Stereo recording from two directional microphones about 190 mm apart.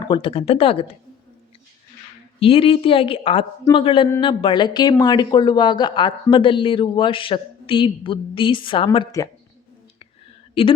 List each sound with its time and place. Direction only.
0.1 s a woman's voice: 25° left (ahead or behind)
2.4 s a woman's voice: 30° left (ahead or behind)
10.6 s a woman's voice: 30° left (ahead or behind)